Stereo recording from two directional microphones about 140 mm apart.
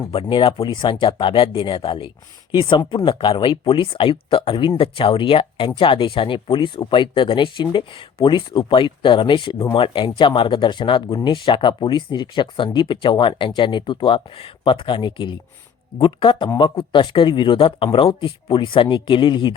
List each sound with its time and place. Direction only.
0.1 s speech: 40° left (ahead or behind)